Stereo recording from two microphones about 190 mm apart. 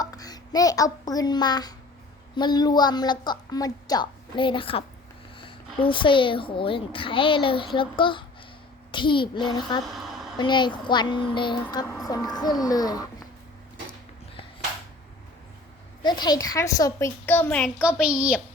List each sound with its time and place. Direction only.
0.0 s a child's voice: 20° left (ahead or behind)
9.8 s a sound: centre (ahead or behind)
10.3 s a woman's voice: 25° left (ahead or behind)
16.0 s a woman's voice: 20° left (ahead or behind)
17.7 s a woman's voice: 5° right (ahead or behind)